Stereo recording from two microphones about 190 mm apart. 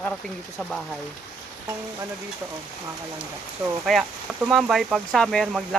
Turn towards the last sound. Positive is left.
turn(degrees=0)  # may be behind; listen again after turning